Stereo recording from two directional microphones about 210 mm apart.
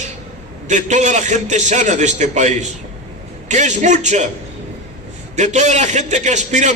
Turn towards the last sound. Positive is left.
turn(degrees=-35)  # may be behind; listen again after turning